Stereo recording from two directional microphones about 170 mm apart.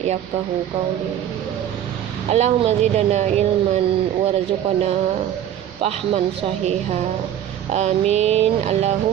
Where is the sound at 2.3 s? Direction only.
40° right (ahead or behind).